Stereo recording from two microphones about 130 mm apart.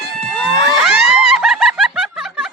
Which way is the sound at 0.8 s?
5° right (ahead or behind).